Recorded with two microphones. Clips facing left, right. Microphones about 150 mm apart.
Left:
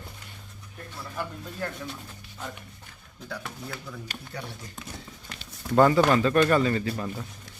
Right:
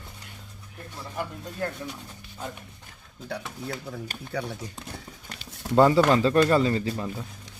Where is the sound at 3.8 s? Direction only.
40° right (ahead or behind).